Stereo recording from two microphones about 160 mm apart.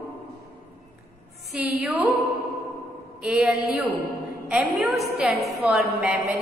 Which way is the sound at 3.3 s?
5° right (ahead or behind).